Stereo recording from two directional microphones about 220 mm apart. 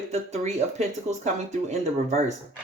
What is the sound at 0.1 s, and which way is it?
Speech, 30° right (ahead or behind).